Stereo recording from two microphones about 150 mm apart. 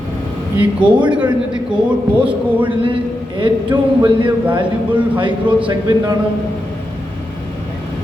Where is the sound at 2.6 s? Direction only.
35° right (ahead or behind).